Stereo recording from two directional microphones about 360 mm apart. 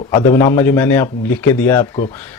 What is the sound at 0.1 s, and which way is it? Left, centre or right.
A man's voice, centre.